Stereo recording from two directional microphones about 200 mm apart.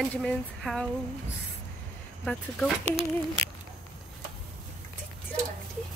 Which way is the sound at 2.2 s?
Centre (ahead or behind).